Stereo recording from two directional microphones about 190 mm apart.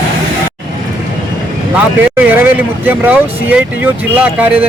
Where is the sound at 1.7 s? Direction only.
5° right (ahead or behind).